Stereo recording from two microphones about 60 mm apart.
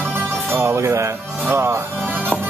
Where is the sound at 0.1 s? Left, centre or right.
Right.